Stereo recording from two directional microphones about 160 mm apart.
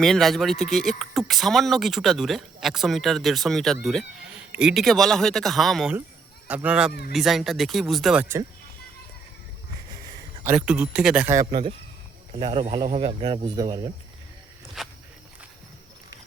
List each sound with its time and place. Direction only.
0.0 s speech: centre (ahead or behind)
10.4 s speech: 10° right (ahead or behind)
11.3 s speech: 30° right (ahead or behind)
14.8 s speech: centre (ahead or behind)